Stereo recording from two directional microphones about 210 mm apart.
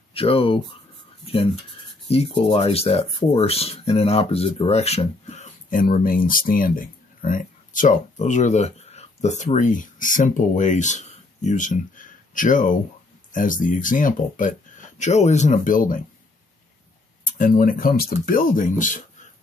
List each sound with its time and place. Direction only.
0.1 s speech: 25° left (ahead or behind)
17.2 s speech: 40° left (ahead or behind)